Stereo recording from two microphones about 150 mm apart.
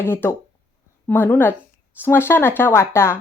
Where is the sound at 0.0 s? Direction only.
15° left (ahead or behind).